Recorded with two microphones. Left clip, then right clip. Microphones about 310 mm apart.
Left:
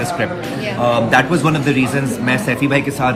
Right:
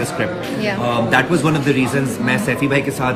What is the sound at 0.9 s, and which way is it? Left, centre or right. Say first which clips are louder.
A man's voice: left 3 dB; centre.